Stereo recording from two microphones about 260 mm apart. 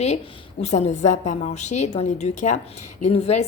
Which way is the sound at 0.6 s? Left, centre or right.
Left.